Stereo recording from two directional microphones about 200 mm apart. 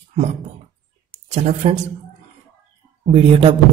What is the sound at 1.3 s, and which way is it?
Speech, 35° right (ahead or behind).